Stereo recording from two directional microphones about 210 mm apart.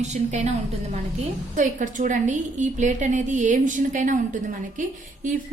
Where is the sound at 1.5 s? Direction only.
35° right (ahead or behind).